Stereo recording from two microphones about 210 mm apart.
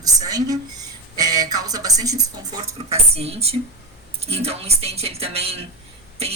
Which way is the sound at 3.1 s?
30° right (ahead or behind).